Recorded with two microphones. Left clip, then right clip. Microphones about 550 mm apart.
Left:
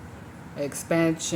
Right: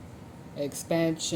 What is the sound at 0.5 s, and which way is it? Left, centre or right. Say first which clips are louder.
Speech: left 3 dB; right.